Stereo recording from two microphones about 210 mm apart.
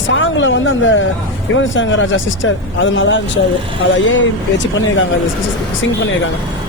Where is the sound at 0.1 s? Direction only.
65° left (ahead or behind).